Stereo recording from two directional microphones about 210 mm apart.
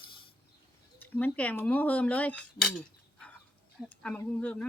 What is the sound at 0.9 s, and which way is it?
Speech, 10° left (ahead or behind).